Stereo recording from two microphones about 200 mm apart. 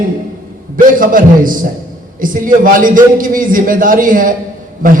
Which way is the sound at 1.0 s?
45° right (ahead or behind).